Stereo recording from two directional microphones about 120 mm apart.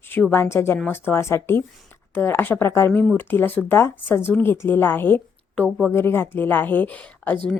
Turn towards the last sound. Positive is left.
turn(degrees=15)  # may be behind; listen again after turning